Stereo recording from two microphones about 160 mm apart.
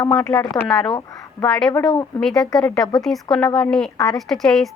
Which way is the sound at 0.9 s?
25° left (ahead or behind).